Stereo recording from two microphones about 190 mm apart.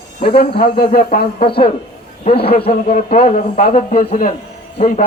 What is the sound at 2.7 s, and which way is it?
A man's voice, 40° left (ahead or behind).